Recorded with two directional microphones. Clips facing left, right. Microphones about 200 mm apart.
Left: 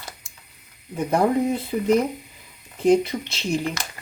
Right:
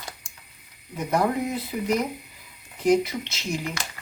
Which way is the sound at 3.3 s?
30° left (ahead or behind).